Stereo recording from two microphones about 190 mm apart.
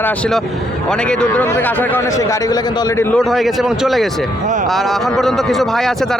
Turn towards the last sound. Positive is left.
turn(degrees=0)  # may be behind; listen again after turning